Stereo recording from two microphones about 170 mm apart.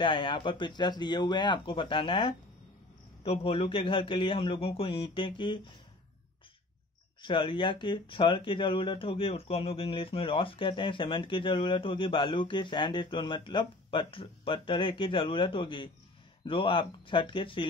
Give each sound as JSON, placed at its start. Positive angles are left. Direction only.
{"t": 0.0, "sound": "speech", "side_deg": 30}
{"t": 7.2, "sound": "speech", "side_deg": 30}